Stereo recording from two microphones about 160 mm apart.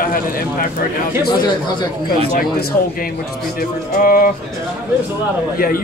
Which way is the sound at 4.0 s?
65° left (ahead or behind).